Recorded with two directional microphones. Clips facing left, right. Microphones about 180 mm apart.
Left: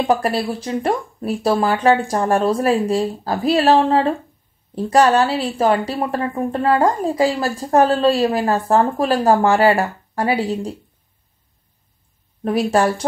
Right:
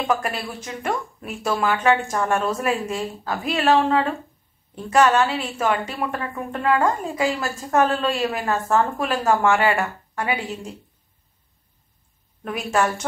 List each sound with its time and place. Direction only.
0.0 s a woman's voice: 35° left (ahead or behind)
12.4 s a woman's voice: 35° left (ahead or behind)